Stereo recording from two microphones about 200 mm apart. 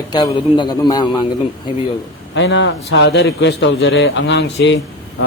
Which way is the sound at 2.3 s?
65° left (ahead or behind).